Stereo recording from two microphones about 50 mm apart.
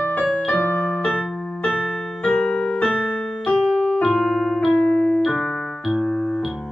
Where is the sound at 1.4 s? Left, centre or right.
Centre.